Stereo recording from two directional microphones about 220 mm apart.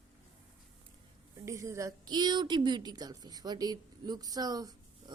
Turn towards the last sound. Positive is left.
turn(degrees=-15)  # may be behind; listen again after turning